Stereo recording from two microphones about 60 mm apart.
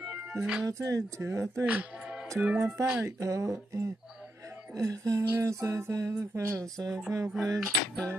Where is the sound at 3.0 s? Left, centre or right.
Right.